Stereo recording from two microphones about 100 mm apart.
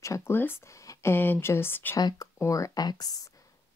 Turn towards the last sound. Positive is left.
turn(degrees=40)  # may be behind; listen again after turning